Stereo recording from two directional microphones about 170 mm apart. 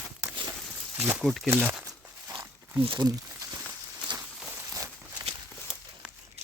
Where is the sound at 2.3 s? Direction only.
15° right (ahead or behind).